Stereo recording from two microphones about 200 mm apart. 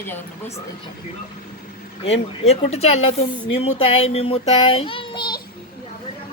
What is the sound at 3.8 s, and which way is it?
Child singing, 30° left (ahead or behind).